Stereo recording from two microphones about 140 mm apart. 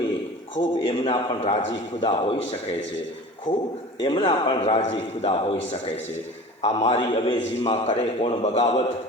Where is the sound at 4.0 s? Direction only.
40° left (ahead or behind).